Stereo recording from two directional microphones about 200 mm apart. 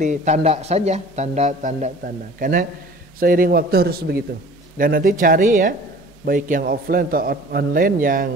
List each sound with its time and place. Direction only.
0.0 s a man's voice: 35° right (ahead or behind)